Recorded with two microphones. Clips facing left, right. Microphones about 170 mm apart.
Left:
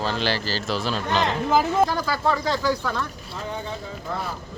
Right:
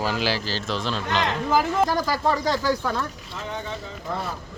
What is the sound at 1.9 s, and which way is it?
Speech, 40° right (ahead or behind).